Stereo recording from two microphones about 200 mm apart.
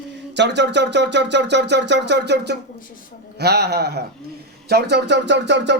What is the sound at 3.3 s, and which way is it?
Speech, 55° right (ahead or behind).